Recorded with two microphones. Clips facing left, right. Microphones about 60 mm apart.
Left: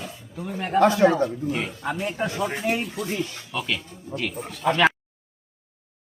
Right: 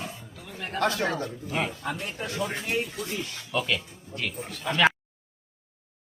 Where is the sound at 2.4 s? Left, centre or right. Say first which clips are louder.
Left 2 dB; centre.